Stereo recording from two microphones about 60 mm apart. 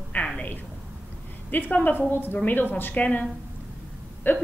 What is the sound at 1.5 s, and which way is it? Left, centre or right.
A woman's voice, left.